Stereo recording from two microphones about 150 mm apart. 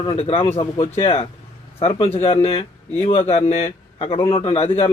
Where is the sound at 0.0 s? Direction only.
40° left (ahead or behind).